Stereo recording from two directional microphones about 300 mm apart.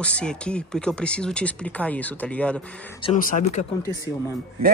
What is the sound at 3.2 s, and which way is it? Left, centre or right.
Speech, left.